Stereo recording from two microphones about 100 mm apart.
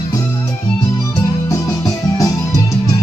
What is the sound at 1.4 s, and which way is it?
Music, 30° left (ahead or behind).